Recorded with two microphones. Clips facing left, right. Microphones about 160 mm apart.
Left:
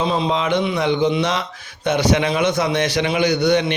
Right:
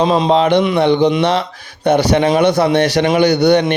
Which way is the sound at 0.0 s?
90° right.